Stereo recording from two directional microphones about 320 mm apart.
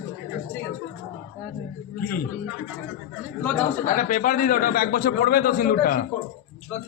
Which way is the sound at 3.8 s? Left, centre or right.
Left.